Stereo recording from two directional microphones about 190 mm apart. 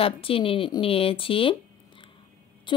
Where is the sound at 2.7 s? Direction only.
25° left (ahead or behind).